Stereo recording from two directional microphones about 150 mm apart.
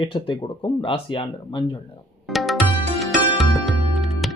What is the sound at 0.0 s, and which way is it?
Speech, 35° left (ahead or behind).